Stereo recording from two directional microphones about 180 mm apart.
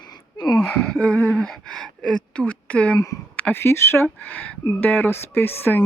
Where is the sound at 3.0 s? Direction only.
20° left (ahead or behind).